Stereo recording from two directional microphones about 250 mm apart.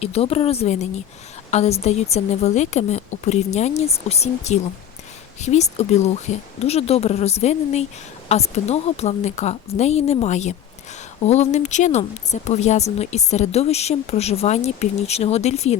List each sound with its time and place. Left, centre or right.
0.0 s speech: left